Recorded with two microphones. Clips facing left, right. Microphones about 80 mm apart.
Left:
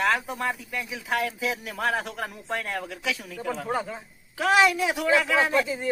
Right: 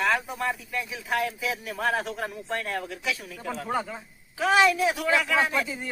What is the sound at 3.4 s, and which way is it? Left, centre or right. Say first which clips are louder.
Speech: left 2 dB; centre.